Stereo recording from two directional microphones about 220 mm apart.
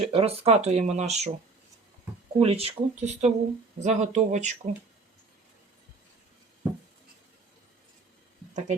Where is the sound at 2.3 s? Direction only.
25° right (ahead or behind).